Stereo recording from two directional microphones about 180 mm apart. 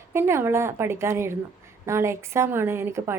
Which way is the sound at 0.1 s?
15° right (ahead or behind).